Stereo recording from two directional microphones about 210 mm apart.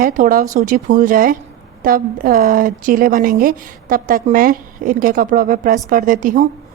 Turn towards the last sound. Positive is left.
turn(degrees=-40)  # may be behind; listen again after turning